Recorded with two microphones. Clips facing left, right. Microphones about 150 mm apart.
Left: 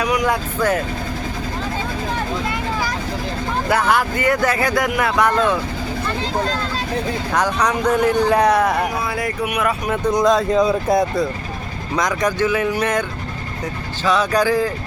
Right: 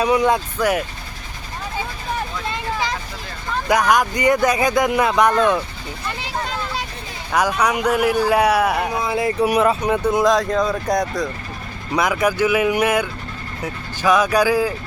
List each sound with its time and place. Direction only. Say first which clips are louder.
0.0 s speech: right 3 dB; 25° right (ahead or behind)
0.6 s speech: left 2 dB; 10° right (ahead or behind)
3.7 s speech: right 2 dB; 15° right (ahead or behind)
7.3 s speech: right 2 dB; 10° right (ahead or behind)
9.0 s speech: right 3 dB; 25° right (ahead or behind)
9.9 s speech: even; 5° right (ahead or behind)
11.9 s speech: right 1 dB; 10° right (ahead or behind)